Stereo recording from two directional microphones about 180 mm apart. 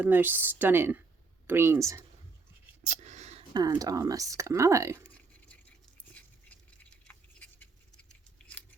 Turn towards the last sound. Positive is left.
turn(degrees=10)  # may be behind; listen again after turning